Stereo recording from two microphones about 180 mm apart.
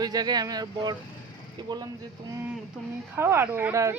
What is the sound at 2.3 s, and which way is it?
Speech, 10° right (ahead or behind).